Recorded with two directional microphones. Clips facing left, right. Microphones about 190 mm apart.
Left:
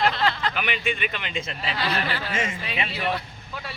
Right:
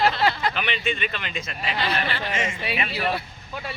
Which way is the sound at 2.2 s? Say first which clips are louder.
Right 1 dB; 10° right (ahead or behind).